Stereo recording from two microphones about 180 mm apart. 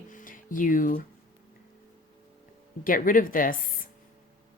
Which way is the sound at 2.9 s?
50° left (ahead or behind).